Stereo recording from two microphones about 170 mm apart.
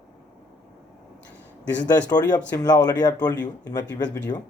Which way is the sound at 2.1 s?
25° left (ahead or behind).